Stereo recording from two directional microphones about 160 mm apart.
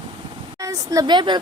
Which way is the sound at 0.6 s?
20° right (ahead or behind).